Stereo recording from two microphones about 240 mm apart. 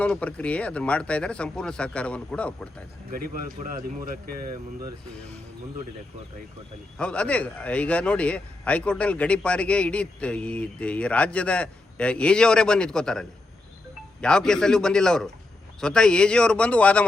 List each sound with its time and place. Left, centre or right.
0.0 s speech: centre
3.1 s speech: right
7.0 s speech: centre